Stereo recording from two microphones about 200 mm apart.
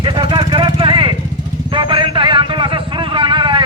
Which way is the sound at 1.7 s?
25° right (ahead or behind).